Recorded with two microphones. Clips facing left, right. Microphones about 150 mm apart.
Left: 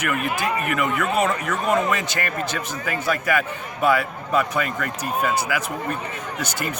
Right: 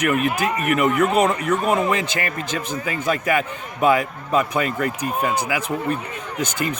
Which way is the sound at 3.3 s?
20° right (ahead or behind).